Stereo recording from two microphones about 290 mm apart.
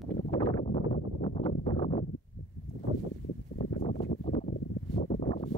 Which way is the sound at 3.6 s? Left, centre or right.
Centre.